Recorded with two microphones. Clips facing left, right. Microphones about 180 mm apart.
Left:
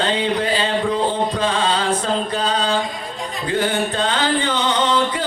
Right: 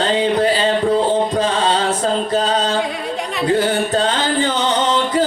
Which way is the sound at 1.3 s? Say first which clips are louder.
Right 3 dB; 40° right (ahead or behind).